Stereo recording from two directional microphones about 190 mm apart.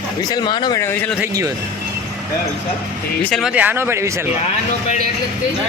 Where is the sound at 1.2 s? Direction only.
15° right (ahead or behind).